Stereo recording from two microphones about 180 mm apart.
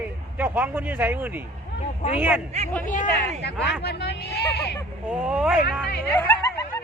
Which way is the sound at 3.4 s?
65° left (ahead or behind).